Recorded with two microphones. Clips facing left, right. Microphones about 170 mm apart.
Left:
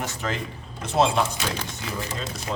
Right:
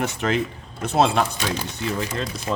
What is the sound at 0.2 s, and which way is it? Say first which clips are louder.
Speech: right 7 dB; 65° right (ahead or behind).